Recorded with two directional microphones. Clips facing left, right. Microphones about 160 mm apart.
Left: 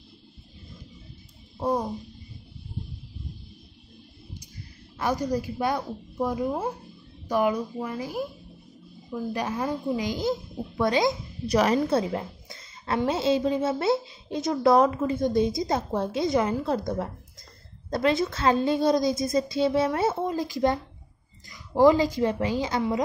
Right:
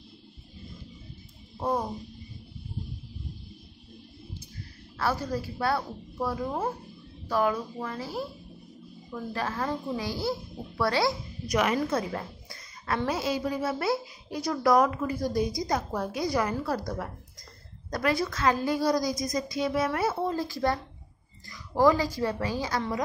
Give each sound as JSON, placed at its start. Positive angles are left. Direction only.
{"t": 1.6, "sound": "a sound", "side_deg": 10}
{"t": 4.9, "sound": "a woman's voice", "side_deg": 15}
{"t": 11.4, "sound": "a woman's voice", "side_deg": 35}